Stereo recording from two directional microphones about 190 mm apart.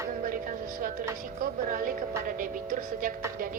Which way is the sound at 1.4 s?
50° right (ahead or behind).